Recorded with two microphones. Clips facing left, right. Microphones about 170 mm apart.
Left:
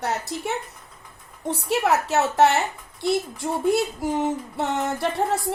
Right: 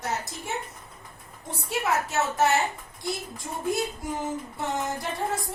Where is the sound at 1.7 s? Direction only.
70° left (ahead or behind).